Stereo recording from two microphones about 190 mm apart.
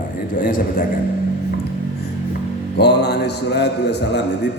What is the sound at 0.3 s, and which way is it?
Speech, 45° left (ahead or behind).